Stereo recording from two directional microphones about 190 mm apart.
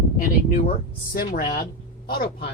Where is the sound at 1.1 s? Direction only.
50° left (ahead or behind).